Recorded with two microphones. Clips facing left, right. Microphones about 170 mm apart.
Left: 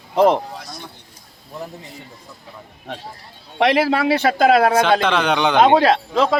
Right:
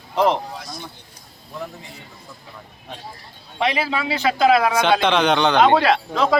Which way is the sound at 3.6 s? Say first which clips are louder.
Left 6 dB; 70° left (ahead or behind).